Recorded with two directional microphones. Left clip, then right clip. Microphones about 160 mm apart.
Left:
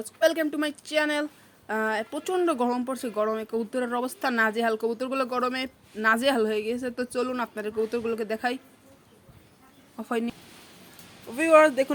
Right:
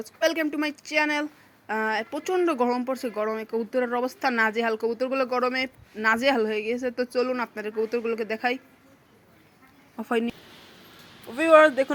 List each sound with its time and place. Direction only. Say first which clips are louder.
0.0 s speech: left 1 dB; 30° left (ahead or behind)
0.9 s speech: right 1 dB; 10° left (ahead or behind)
2.0 s speech: right 1 dB; 30° left (ahead or behind)
2.3 s speech: right 2 dB; 10° left (ahead or behind)
4.0 s speech: right 2 dB; 40° left (ahead or behind)
4.6 s speech: right 1 dB; 10° left (ahead or behind)
10.0 s speech: right 3 dB; 20° right (ahead or behind)
11.3 s speech: right 2 dB; 5° left (ahead or behind)